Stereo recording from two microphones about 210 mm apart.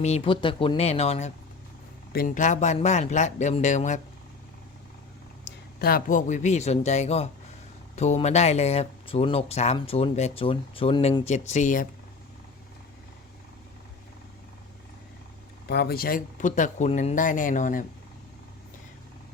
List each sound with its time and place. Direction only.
0.0 s speech: 30° left (ahead or behind)
5.5 s speech: 45° left (ahead or behind); by 11.2 s 25° left (ahead or behind)
11.3 s speech: 35° left (ahead or behind)
15.6 s speech: 50° left (ahead or behind)